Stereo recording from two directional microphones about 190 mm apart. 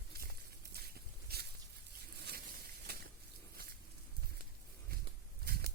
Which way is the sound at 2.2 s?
55° right (ahead or behind).